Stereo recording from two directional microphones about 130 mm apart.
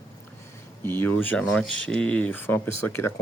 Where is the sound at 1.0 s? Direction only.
15° left (ahead or behind).